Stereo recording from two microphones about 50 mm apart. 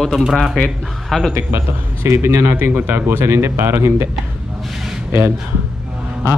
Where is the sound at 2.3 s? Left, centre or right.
Right.